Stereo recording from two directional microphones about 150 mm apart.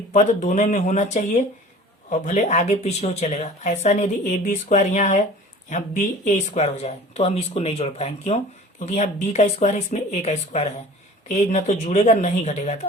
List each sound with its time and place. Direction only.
0.1 s speech: 55° left (ahead or behind)